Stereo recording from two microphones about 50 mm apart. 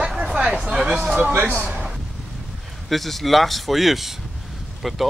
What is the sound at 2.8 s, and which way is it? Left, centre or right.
Speech, centre.